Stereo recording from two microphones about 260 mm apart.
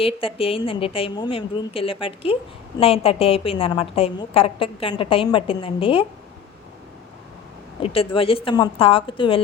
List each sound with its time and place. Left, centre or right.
0.0 s a woman's voice: left
7.8 s a woman's voice: left